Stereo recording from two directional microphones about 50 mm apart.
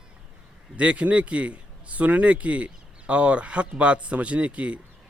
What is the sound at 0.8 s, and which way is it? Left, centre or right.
Speech, right.